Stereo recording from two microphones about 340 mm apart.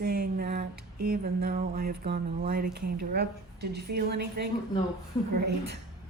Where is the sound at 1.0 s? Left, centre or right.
Right.